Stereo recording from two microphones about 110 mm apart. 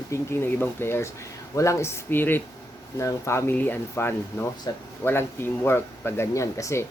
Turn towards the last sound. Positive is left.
turn(degrees=25)  # may be behind; listen again after turning